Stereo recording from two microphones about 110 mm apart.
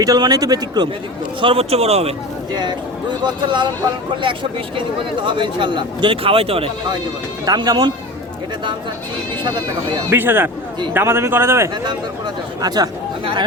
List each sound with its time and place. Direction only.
0.0 s a man's voice: 35° right (ahead or behind)
1.4 s speech: 55° right (ahead or behind)
2.5 s speech: 40° right (ahead or behind)
5.2 s speech: 45° right (ahead or behind)
7.4 s a man's voice: 40° right (ahead or behind)
9.4 s speech: 45° right (ahead or behind)
10.1 s a man's voice: 20° right (ahead or behind)
12.6 s a man's voice: 35° right (ahead or behind)